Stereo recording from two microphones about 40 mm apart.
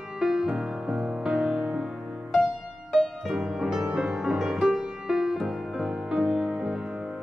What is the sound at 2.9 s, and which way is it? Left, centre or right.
Music, centre.